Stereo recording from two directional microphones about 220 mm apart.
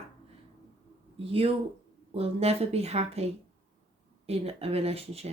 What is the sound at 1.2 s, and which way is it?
A woman's voice, 25° right (ahead or behind).